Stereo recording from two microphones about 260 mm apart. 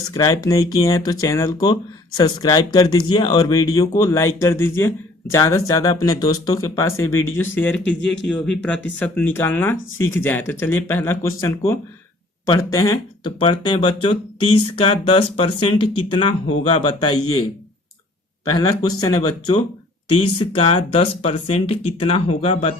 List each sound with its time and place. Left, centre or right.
0.1 s speech: centre
18.5 s speech: centre